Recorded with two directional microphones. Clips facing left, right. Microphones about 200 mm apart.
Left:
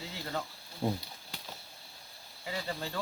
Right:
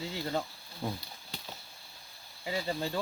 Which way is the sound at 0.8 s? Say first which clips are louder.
Left 4 dB; 25° left (ahead or behind).